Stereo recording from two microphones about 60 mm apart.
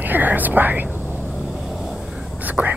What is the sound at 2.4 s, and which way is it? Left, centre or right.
Whispering, right.